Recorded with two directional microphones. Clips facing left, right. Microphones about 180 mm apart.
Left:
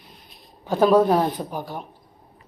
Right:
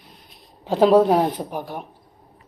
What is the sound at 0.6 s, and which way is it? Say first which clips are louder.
Speech: right 2 dB; 30° right (ahead or behind).